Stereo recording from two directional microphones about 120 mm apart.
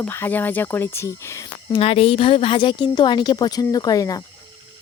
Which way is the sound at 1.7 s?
55° left (ahead or behind).